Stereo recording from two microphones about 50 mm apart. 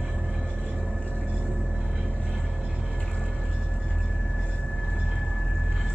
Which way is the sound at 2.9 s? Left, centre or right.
Centre.